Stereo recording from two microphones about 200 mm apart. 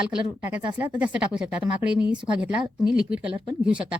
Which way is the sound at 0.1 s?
10° right (ahead or behind).